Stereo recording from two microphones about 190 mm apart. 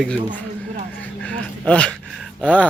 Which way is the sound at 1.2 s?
5° left (ahead or behind).